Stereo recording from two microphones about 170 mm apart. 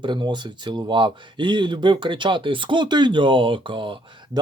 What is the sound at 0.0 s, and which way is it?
Speech, 25° right (ahead or behind).